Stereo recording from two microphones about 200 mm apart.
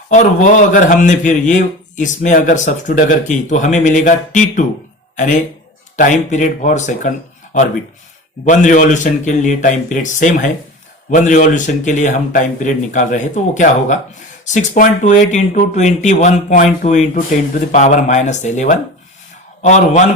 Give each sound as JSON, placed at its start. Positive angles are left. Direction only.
{"t": 0.1, "sound": "speech", "side_deg": 40}
{"t": 8.4, "sound": "speech", "side_deg": 40}